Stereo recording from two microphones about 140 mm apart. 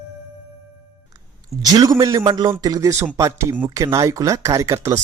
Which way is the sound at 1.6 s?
25° right (ahead or behind).